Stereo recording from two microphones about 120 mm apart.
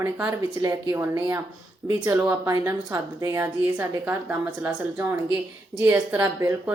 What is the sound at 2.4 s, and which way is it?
Speech, 25° right (ahead or behind).